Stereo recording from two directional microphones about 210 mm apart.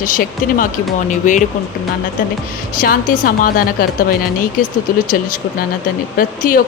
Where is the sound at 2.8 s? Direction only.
40° left (ahead or behind).